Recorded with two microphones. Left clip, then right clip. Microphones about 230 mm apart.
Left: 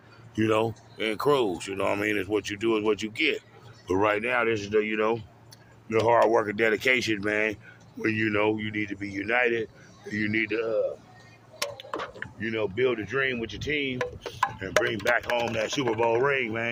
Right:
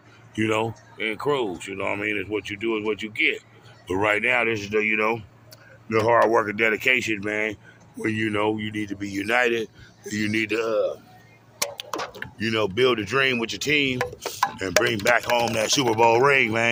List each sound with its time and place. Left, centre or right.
0.3 s speech: centre
5.9 s speech: right
15.5 s speech: right